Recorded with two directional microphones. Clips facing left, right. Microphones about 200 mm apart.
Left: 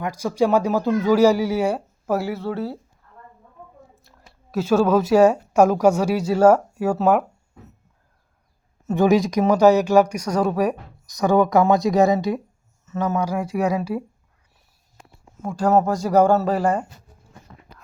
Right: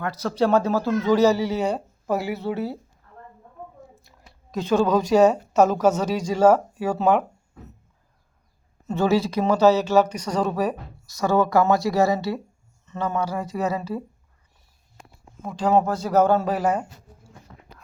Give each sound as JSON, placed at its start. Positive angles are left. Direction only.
{"t": 0.0, "sound": "speech", "side_deg": 10}
{"t": 2.3, "sound": "speech", "side_deg": -20}
{"t": 4.0, "sound": "a woman's voice", "side_deg": 5}
{"t": 8.9, "sound": "speech", "side_deg": 15}
{"t": 12.8, "sound": "speech", "side_deg": 5}
{"t": 15.4, "sound": "speech", "side_deg": 10}
{"t": 16.5, "sound": "speech", "side_deg": -5}